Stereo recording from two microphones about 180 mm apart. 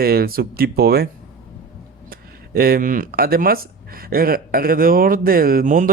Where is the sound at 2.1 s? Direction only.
55° right (ahead or behind).